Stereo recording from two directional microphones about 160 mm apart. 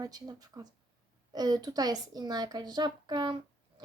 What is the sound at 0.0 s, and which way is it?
A woman's voice, 25° right (ahead or behind).